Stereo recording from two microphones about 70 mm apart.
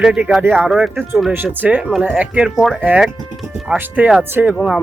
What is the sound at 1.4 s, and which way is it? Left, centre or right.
Speech, right.